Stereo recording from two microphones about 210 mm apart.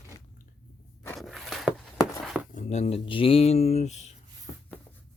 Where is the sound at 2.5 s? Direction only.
35° left (ahead or behind).